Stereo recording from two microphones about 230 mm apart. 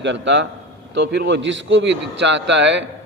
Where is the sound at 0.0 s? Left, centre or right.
Right.